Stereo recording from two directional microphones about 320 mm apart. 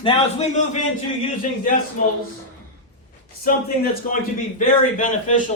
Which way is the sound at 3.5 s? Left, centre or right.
Left.